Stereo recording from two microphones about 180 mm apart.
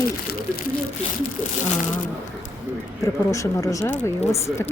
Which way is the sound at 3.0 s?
15° left (ahead or behind).